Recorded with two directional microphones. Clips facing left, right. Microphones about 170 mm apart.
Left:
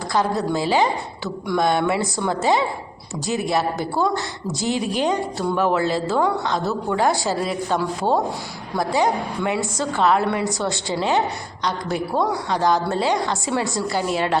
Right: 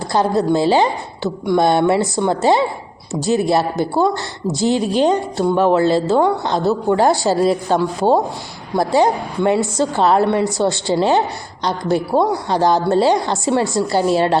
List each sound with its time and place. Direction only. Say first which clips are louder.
0.1 s a woman's voice: right 6 dB; 30° right (ahead or behind)